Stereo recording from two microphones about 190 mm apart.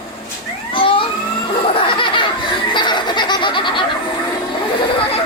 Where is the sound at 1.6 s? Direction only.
25° left (ahead or behind).